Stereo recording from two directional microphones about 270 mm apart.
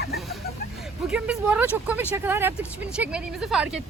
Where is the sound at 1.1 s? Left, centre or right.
Centre.